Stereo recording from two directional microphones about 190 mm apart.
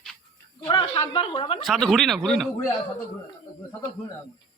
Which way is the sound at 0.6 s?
25° left (ahead or behind).